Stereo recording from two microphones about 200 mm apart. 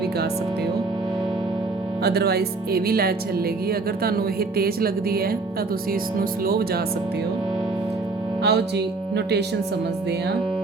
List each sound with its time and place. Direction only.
2.0 s speech: 50° right (ahead or behind)
8.4 s speech: 55° right (ahead or behind)